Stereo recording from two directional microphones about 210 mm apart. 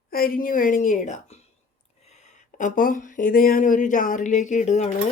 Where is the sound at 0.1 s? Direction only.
45° left (ahead or behind).